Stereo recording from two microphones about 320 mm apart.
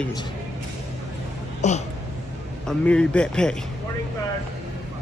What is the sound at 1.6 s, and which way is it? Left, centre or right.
Speech, left.